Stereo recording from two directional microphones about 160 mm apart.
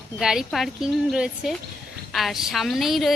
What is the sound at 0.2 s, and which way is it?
A woman's voice, 5° right (ahead or behind).